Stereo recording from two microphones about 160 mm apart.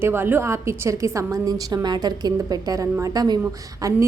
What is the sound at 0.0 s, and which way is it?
A woman's voice, 15° right (ahead or behind).